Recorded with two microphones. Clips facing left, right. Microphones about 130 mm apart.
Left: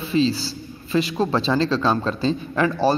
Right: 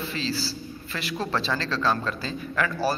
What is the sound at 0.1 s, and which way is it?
A man's voice, 20° left (ahead or behind).